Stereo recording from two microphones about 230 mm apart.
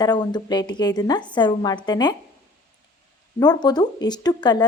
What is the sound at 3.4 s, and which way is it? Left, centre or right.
A woman's voice, centre.